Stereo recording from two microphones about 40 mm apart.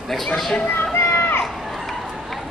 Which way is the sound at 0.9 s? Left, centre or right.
Left.